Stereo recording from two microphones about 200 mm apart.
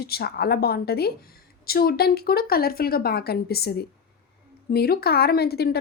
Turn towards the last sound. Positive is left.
turn(degrees=50)  # may be behind; listen again after turning